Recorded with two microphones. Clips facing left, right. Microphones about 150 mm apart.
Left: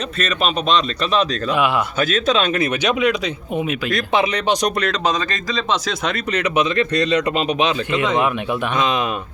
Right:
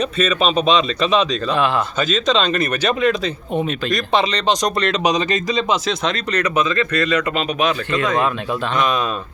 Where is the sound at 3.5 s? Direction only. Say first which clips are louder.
Right 1 dB; 10° left (ahead or behind).